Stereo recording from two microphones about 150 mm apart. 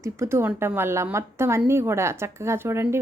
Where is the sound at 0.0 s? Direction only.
20° right (ahead or behind).